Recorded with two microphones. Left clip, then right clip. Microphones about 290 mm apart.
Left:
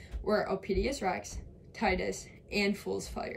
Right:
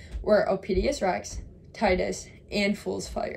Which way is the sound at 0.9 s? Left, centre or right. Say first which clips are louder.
Right 6 dB; right.